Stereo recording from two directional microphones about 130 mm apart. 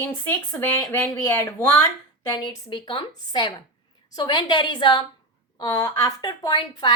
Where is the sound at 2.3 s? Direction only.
30° left (ahead or behind).